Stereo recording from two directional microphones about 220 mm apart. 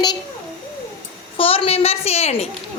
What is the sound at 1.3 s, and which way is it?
A woman's voice, 25° left (ahead or behind).